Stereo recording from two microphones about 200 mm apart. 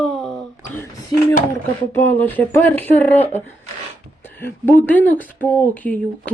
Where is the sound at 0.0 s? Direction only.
5° left (ahead or behind).